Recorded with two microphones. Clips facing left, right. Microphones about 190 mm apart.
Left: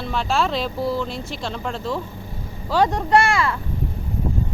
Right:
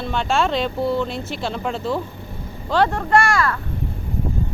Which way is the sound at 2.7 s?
15° left (ahead or behind).